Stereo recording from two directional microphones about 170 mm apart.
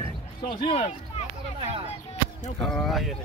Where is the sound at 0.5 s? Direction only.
40° left (ahead or behind).